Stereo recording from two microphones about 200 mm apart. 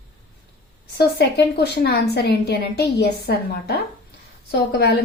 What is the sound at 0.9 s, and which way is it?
Speech, 55° left (ahead or behind).